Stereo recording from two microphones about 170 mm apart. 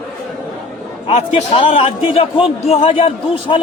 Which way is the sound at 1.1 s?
35° left (ahead or behind).